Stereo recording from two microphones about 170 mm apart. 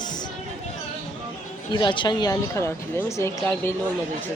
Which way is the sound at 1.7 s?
25° left (ahead or behind).